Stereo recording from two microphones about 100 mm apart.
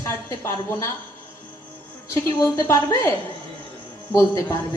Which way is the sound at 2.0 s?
30° left (ahead or behind).